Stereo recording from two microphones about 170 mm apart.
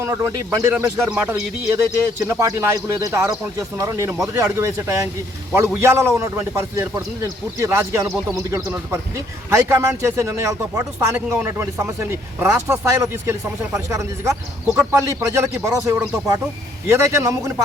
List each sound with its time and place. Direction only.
0.0 s speech: 15° right (ahead or behind)